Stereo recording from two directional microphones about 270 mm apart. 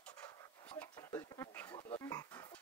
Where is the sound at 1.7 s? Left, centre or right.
Centre.